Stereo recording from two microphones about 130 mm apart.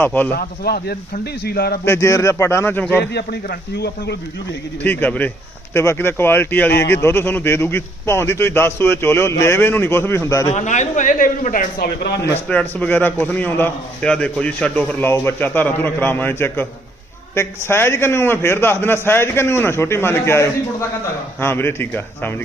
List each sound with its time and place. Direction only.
0.0 s speech: 15° left (ahead or behind)
1.8 s a man's voice: 20° left (ahead or behind)
4.8 s speech: 15° left (ahead or behind)
10.5 s speech: 65° left (ahead or behind); by 11.9 s 90° left
12.3 s a man's voice: 10° left (ahead or behind)